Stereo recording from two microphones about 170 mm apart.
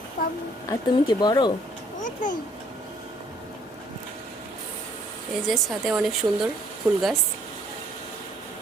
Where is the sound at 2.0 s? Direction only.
50° left (ahead or behind).